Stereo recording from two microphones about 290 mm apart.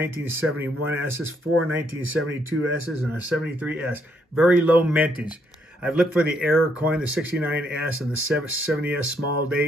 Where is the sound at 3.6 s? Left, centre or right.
Centre.